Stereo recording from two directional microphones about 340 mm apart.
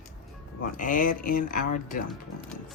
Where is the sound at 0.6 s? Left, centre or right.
Left.